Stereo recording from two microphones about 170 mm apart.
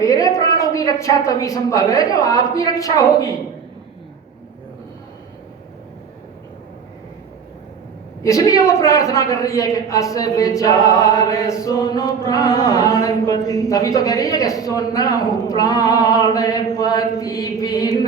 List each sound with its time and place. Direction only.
0.0 s a woman's voice: 20° left (ahead or behind)
8.2 s a woman's voice: 20° left (ahead or behind)